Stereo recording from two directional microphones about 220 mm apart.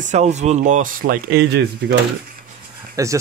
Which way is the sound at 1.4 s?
55° right (ahead or behind).